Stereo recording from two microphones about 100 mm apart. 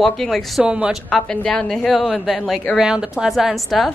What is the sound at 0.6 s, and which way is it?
Speech, 10° right (ahead or behind).